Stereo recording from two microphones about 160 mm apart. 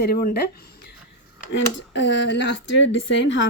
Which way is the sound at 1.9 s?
90° left.